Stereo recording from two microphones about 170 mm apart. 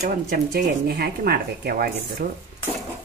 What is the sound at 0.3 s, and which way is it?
Speech, 65° right (ahead or behind).